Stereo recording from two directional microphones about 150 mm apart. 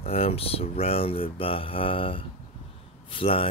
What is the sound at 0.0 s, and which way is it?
Speech, 40° left (ahead or behind).